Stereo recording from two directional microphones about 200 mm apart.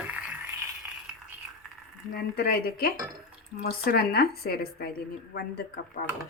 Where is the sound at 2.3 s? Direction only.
50° left (ahead or behind).